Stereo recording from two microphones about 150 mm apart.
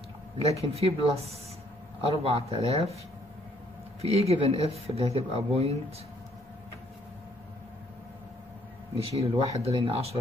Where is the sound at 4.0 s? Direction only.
45° right (ahead or behind).